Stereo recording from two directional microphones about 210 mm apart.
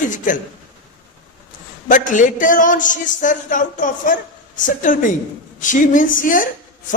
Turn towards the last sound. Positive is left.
turn(degrees=40)  # may be behind; listen again after turning